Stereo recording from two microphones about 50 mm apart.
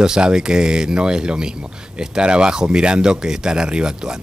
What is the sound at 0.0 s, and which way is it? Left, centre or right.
A man's voice, centre.